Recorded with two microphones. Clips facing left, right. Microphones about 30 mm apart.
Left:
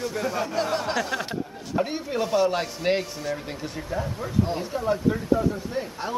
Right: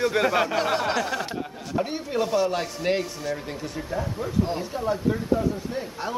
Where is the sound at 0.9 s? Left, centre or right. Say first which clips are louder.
Even; centre.